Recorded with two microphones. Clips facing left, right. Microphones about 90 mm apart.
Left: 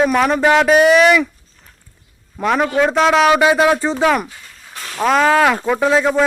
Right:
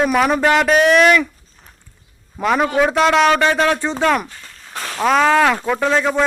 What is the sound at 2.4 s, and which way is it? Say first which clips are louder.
A man's voice: even; centre (ahead or behind).